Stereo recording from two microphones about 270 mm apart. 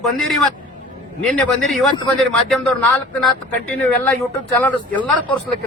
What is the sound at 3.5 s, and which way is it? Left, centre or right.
Speech, centre.